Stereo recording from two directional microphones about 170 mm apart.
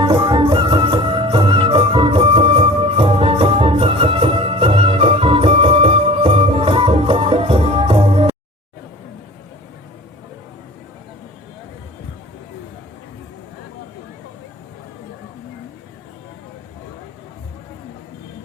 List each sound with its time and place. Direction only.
0.0 s music: 30° right (ahead or behind)